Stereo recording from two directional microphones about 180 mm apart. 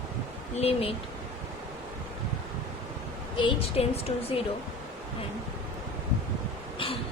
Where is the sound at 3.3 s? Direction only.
25° left (ahead or behind).